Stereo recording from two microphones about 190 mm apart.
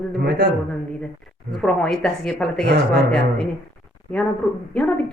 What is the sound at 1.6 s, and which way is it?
Speech, 5° left (ahead or behind).